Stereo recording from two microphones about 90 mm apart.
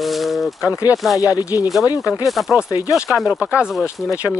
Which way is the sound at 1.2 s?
40° left (ahead or behind).